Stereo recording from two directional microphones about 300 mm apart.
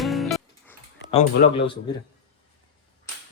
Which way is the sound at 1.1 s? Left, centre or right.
Centre.